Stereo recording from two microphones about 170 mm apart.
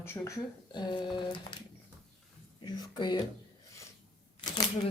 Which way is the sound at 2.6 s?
25° left (ahead or behind).